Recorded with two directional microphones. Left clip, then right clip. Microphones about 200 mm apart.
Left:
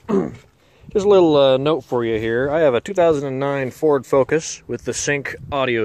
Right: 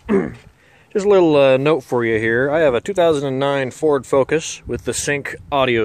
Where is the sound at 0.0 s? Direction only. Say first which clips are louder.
Right 2 dB; 5° right (ahead or behind).